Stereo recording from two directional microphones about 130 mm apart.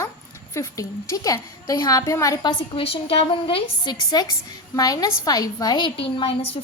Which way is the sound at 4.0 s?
30° left (ahead or behind).